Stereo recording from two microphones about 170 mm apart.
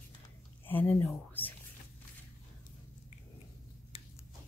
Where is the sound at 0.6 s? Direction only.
10° left (ahead or behind).